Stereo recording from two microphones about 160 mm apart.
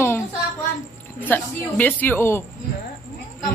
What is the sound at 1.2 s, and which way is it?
A woman's voice, 10° left (ahead or behind).